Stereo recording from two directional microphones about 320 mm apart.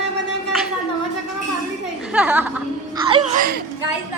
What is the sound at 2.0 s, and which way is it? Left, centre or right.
Speech, centre.